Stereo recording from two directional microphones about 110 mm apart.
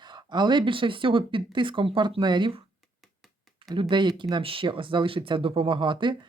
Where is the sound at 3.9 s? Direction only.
45° right (ahead or behind).